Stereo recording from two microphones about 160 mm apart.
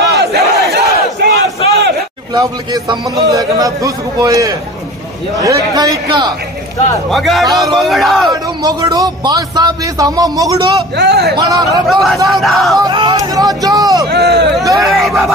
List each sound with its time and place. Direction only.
0.1 s battle cry: 90° right
2.3 s speech: 25° right (ahead or behind)
7.1 s speech: centre (ahead or behind)
8.3 s speech: 25° right (ahead or behind)
11.0 s speech: 90° right
11.3 s speech: 25° right (ahead or behind)
11.9 s speech: centre (ahead or behind)
12.7 s speech: 25° right (ahead or behind)
14.0 s speech: 90° right
14.8 s speech: centre (ahead or behind)